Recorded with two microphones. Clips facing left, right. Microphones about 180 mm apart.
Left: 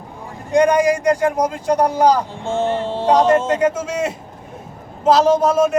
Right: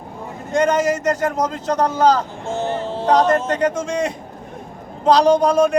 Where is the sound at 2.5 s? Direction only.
30° left (ahead or behind).